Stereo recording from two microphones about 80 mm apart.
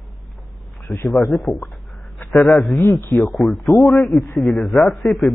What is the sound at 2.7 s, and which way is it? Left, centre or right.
Speech, left.